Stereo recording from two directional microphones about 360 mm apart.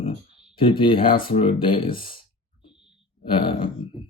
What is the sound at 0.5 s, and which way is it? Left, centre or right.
A man's voice, centre.